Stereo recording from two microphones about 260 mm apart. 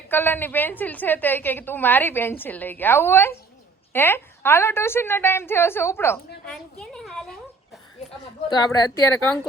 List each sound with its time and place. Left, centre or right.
0.1 s a woman's voice: centre
6.4 s a sound: centre
8.2 s a woman's voice: centre